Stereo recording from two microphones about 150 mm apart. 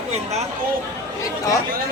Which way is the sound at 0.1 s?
45° right (ahead or behind).